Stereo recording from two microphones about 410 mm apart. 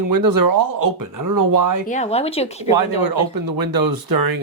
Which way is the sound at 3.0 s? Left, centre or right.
Right.